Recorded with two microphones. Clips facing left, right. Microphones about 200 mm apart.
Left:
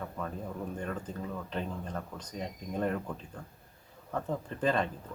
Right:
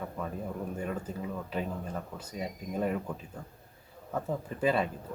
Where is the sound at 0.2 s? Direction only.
10° right (ahead or behind).